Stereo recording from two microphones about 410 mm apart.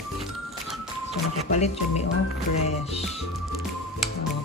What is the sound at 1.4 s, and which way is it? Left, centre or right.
Speech, centre.